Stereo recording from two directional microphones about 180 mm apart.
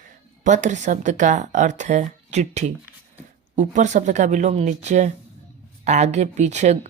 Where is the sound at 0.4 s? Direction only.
40° right (ahead or behind).